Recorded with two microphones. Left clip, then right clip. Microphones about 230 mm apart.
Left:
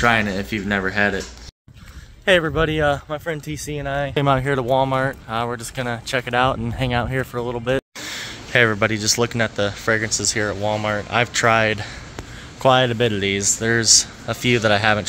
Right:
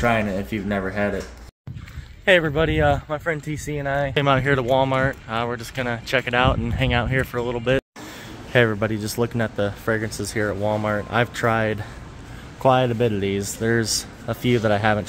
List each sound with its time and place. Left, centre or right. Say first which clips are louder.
0.0 s speech: left 3 dB; centre
2.2 s speech: even; centre
3.4 s speech: right 1 dB; centre
4.1 s speech: left 1 dB; centre